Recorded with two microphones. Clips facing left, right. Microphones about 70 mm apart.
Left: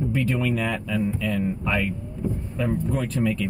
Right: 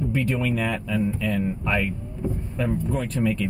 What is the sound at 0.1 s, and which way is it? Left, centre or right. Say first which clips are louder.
Speech: even; centre.